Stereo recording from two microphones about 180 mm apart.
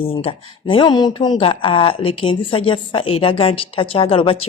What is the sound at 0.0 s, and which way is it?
Speech, 30° left (ahead or behind).